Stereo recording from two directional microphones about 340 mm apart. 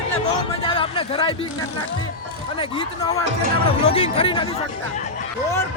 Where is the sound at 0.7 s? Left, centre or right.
Centre.